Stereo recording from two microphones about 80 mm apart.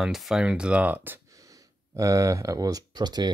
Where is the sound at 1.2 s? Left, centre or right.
Right.